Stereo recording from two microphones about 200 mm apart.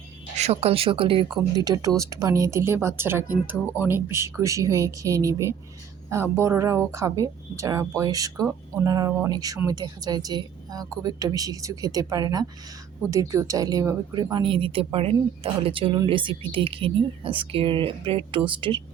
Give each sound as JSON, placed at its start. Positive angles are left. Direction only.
{"t": 0.3, "sound": "speech", "side_deg": -30}